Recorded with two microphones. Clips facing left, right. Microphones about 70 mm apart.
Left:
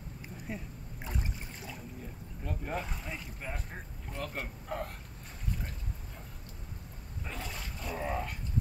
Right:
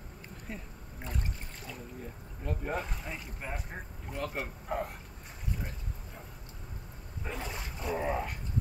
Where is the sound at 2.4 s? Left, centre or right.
Centre.